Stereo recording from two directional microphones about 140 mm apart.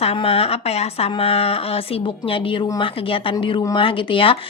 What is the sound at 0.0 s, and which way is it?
Speech, 45° left (ahead or behind).